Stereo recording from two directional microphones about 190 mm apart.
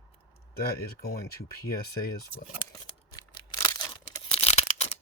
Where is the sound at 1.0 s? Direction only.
55° left (ahead or behind).